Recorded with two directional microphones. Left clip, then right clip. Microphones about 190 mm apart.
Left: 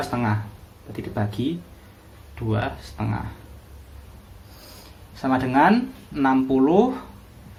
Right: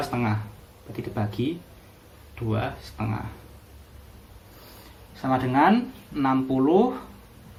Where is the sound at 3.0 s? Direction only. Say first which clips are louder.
Left 2 dB; 45° left (ahead or behind).